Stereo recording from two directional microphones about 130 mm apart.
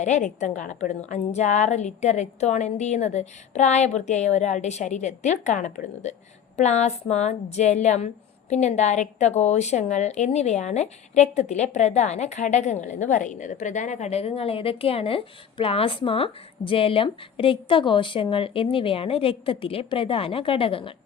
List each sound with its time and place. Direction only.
0.0 s a woman's voice: 65° left (ahead or behind); by 20.9 s 45° left (ahead or behind)